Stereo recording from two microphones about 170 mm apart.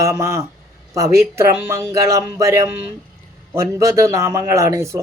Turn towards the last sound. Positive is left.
turn(degrees=-20)  # may be behind; listen again after turning